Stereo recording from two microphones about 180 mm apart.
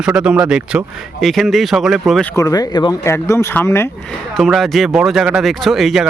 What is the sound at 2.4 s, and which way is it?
Speech, 20° left (ahead or behind).